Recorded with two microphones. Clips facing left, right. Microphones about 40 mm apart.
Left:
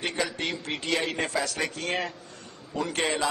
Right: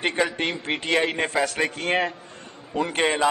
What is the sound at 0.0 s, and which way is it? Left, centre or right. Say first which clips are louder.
A man's voice: right 6 dB; right.